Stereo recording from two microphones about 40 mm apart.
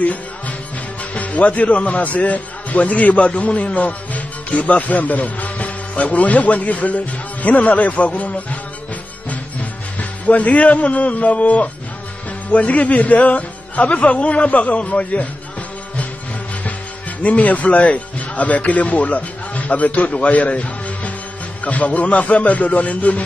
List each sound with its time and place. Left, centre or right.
0.0 s music: left
1.1 s speech: left
9.9 s speech: left
17.2 s speech: left